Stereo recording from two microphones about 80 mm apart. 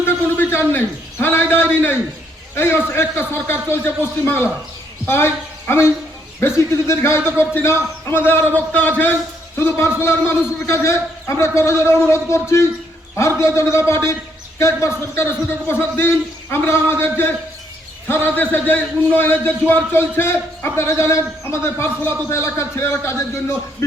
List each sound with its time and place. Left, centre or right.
0.7 s a man's voice: left